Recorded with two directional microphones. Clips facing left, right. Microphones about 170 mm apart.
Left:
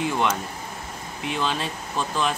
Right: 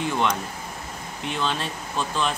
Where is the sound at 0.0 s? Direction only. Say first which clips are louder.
Even; 5° left (ahead or behind).